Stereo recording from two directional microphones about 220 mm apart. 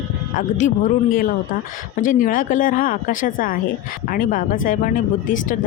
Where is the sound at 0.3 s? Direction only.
35° left (ahead or behind).